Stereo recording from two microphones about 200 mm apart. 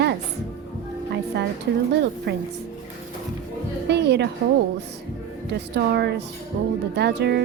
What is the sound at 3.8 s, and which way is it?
Music, 55° right (ahead or behind).